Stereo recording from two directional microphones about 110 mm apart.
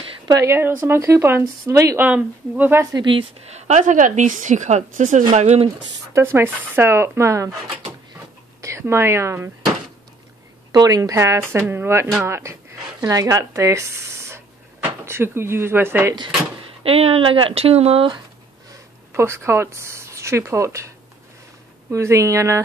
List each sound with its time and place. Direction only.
0.3 s a woman's voice: 25° right (ahead or behind)
2.0 s speech: 15° right (ahead or behind)
2.9 s speech: 45° right (ahead or behind)
3.4 s a woman's voice: 90° right
6.1 s a woman's voice: 20° right (ahead or behind)
8.5 s speech: 25° right (ahead or behind)
10.7 s a woman's voice: 35° right (ahead or behind)
16.8 s speech: 60° right (ahead or behind)
18.7 s speech: 25° right (ahead or behind)
21.9 s a woman's voice: 25° right (ahead or behind)